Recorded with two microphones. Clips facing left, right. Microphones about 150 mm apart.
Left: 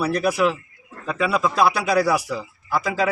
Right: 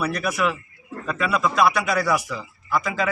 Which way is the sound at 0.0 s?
30° left (ahead or behind).